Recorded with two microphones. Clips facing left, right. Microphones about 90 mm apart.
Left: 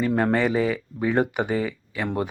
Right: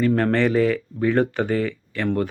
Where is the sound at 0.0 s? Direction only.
10° left (ahead or behind).